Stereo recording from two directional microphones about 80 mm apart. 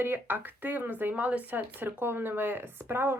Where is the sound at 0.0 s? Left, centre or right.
Right.